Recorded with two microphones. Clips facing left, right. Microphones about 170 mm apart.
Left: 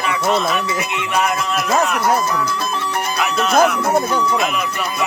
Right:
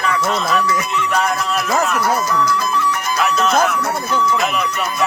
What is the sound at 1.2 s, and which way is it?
Speech, centre (ahead or behind).